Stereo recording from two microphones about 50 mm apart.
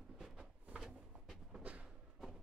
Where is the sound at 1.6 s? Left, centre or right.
Right.